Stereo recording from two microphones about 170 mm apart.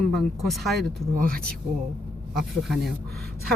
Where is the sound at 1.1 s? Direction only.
55° right (ahead or behind).